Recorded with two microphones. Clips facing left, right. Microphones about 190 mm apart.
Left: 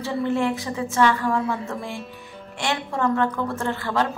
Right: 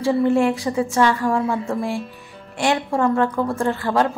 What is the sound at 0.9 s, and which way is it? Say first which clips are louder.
Speech: even; 30° right (ahead or behind).